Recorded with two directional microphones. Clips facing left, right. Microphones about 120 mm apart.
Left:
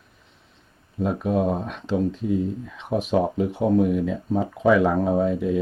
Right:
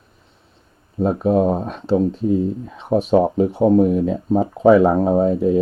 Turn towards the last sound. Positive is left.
turn(degrees=-35)  # may be behind; listen again after turning